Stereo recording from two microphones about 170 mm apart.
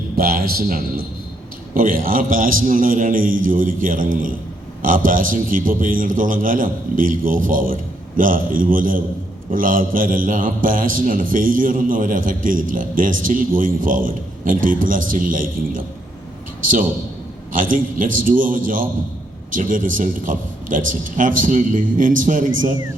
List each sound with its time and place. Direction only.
0.2 s a man's voice: 60° right (ahead or behind)
17.5 s a man's voice: 50° right (ahead or behind)